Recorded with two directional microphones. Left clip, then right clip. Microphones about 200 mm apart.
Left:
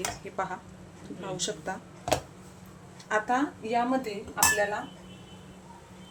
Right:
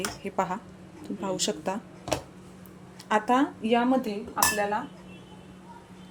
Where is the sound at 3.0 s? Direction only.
45° right (ahead or behind).